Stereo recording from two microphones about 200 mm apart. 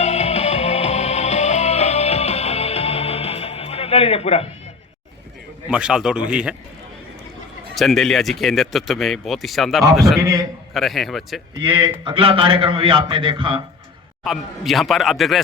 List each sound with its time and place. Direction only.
0.0 s music: 35° left (ahead or behind)
5.6 s speech: 5° right (ahead or behind)
7.8 s speech: centre (ahead or behind)
10.2 s a man's voice: 15° right (ahead or behind)
10.8 s speech: centre (ahead or behind)
11.6 s a man's voice: 25° right (ahead or behind)
14.3 s speech: centre (ahead or behind)